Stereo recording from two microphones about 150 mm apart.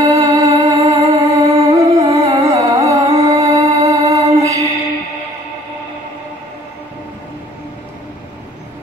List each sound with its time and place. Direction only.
0.0 s music: 20° right (ahead or behind)